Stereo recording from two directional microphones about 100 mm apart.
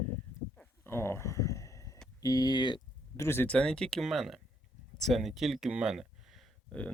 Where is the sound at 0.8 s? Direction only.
25° left (ahead or behind).